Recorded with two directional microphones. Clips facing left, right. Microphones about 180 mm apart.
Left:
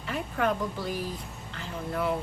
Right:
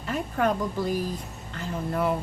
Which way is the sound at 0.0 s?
45° right (ahead or behind).